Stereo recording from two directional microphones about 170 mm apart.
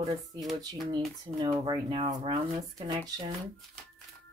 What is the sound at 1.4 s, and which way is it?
Speech, 30° right (ahead or behind).